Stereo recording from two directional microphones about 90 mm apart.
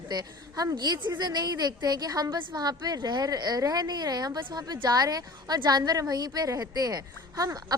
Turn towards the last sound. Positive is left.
turn(degrees=-40)  # may be behind; listen again after turning